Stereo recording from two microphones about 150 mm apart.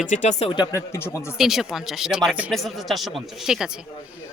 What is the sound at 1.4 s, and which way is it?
Speech, centre (ahead or behind).